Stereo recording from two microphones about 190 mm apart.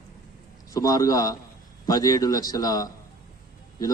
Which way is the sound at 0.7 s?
20° left (ahead or behind).